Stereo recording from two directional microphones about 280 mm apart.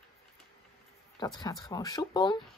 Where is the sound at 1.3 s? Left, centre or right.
Centre.